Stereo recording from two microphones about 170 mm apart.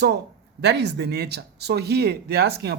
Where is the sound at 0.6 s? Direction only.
80° right.